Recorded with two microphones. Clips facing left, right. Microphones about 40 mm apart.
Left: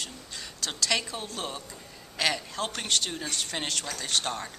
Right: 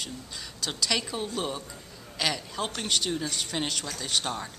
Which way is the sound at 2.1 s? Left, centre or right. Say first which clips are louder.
Left 1 dB; centre.